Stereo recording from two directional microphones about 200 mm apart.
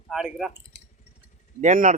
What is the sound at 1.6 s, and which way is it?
Speech, 40° right (ahead or behind).